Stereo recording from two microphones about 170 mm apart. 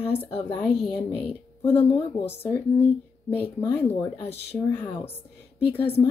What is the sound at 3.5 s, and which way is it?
Speech, 15° left (ahead or behind).